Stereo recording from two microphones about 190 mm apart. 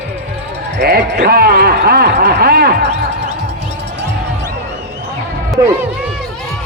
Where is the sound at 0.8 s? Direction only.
55° right (ahead or behind).